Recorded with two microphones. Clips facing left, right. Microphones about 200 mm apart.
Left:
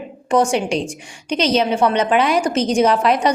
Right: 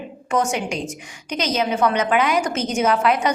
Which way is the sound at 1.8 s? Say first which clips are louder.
Left 3 dB; 30° left (ahead or behind).